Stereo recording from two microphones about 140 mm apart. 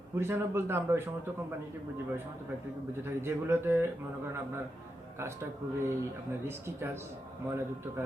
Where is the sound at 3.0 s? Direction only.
15° right (ahead or behind).